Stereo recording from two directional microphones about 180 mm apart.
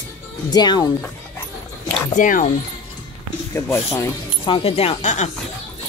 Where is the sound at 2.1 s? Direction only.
50° left (ahead or behind).